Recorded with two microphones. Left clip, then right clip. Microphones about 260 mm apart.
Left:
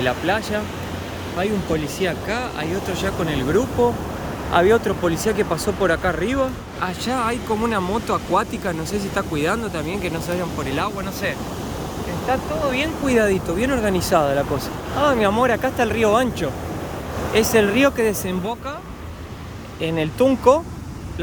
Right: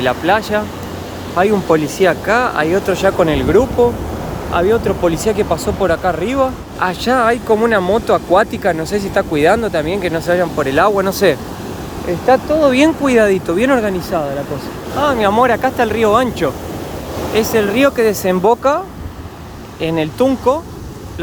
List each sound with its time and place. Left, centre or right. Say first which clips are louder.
0.0 s speech: right 7 dB; centre
13.1 s speech: right 6 dB; centre
19.8 s speech: right 4 dB; centre